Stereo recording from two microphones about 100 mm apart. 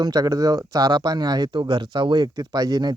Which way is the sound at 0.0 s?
40° right (ahead or behind).